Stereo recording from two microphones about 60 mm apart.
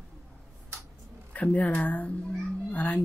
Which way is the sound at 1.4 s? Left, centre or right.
Left.